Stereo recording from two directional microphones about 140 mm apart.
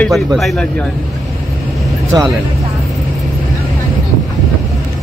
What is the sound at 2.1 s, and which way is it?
Speech, 30° right (ahead or behind).